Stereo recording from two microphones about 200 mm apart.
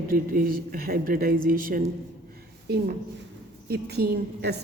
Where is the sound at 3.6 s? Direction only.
55° right (ahead or behind).